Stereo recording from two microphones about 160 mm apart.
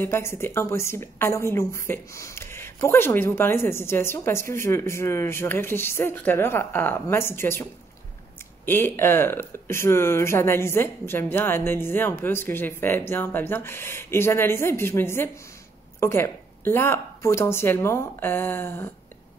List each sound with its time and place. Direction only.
0.0 s a woman's voice: 15° left (ahead or behind)
8.6 s a woman's voice: 15° left (ahead or behind)